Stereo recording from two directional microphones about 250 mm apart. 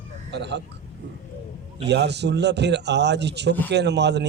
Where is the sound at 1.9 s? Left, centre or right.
Right.